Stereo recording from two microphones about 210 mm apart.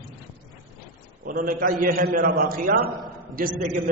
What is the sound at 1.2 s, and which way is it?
A man's voice, 40° right (ahead or behind).